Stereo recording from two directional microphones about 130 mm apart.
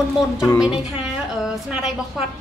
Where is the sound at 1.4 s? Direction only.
5° right (ahead or behind).